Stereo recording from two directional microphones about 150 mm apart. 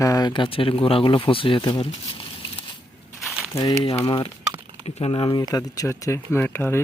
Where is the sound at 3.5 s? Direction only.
20° left (ahead or behind).